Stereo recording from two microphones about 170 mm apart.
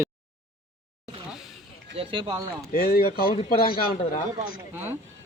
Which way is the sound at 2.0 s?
25° right (ahead or behind).